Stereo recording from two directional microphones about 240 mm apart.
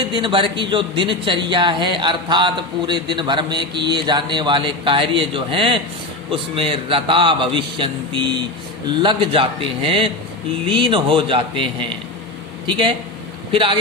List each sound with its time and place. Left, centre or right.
0.0 s speech: centre